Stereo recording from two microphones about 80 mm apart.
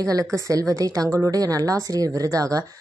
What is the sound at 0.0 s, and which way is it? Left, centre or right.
A woman's voice, right.